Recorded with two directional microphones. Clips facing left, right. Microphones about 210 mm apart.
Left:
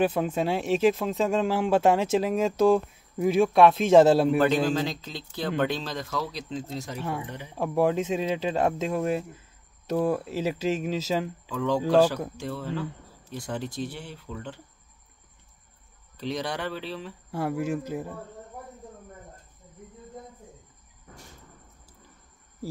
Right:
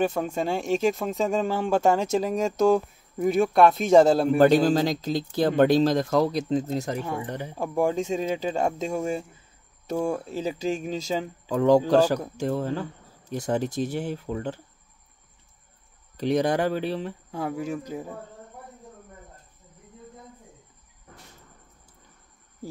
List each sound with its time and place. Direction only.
0.0 s speech: 5° left (ahead or behind)
4.4 s speech: 35° right (ahead or behind)
7.0 s speech: 5° left (ahead or behind)
11.4 s speech: 40° right (ahead or behind)
16.2 s speech: 45° right (ahead or behind)
17.3 s speech: 5° left (ahead or behind)